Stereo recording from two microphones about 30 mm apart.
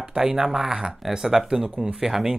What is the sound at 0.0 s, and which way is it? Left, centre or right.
Speech, right.